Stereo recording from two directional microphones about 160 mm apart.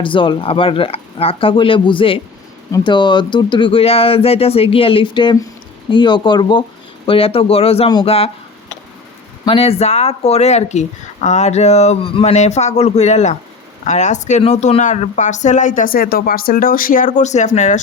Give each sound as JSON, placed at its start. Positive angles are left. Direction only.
{"t": 0.0, "sound": "speech", "side_deg": 30}
{"t": 9.5, "sound": "a woman's voice", "side_deg": 35}